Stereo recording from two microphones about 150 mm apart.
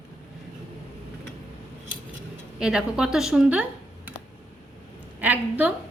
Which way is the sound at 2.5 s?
5° right (ahead or behind).